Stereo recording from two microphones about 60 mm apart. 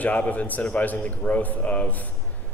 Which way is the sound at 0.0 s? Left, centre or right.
Left.